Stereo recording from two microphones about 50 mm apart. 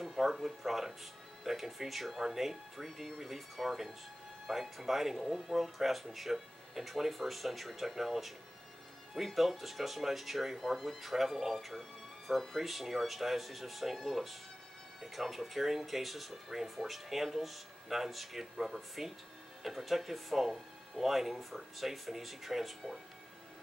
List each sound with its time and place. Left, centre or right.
0.0 s speech: centre